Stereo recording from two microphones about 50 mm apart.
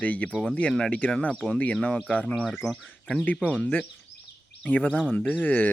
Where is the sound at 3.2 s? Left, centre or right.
Left.